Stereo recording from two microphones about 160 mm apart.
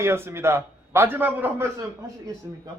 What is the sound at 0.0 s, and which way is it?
A man's voice, 15° right (ahead or behind).